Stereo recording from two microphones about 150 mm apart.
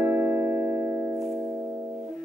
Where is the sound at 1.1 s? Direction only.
Centre (ahead or behind).